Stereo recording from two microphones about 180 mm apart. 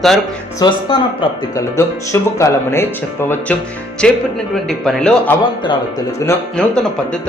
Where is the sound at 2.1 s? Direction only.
15° left (ahead or behind).